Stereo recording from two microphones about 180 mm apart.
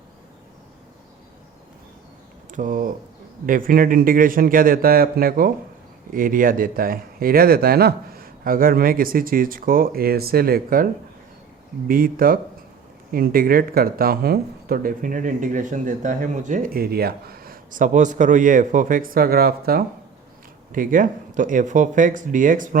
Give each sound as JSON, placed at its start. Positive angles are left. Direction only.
{"t": 2.5, "sound": "speech", "side_deg": -45}
{"t": 11.9, "sound": "speech", "side_deg": -50}